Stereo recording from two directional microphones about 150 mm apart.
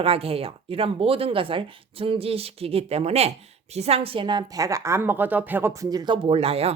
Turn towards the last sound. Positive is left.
turn(degrees=-40)  # may be behind; listen again after turning